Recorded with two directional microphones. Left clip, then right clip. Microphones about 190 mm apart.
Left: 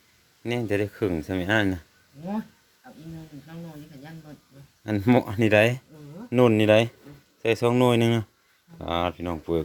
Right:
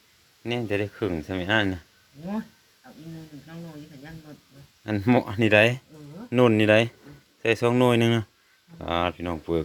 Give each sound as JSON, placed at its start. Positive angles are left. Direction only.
{"t": 0.4, "sound": "speech", "side_deg": 20}
{"t": 4.8, "sound": "speech", "side_deg": 15}